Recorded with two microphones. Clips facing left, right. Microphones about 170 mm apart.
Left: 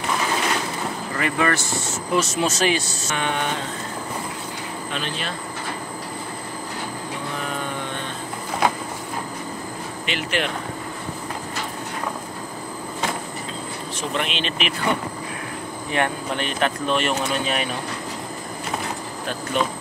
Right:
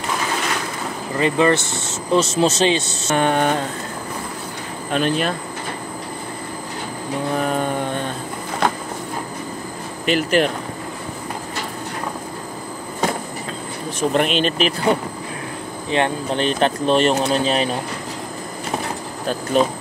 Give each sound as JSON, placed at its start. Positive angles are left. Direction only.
{"t": 1.1, "sound": "speech", "side_deg": -25}
{"t": 3.1, "sound": "speech", "side_deg": -45}
{"t": 4.9, "sound": "speech", "side_deg": -50}
{"t": 7.3, "sound": "mantra", "side_deg": -45}
{"t": 10.0, "sound": "speech", "side_deg": -40}
{"t": 14.1, "sound": "speech", "side_deg": -45}
{"t": 15.9, "sound": "speech", "side_deg": -25}
{"t": 19.2, "sound": "speech", "side_deg": -35}